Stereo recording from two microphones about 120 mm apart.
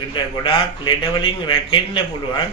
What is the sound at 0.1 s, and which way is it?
Speech, 45° left (ahead or behind).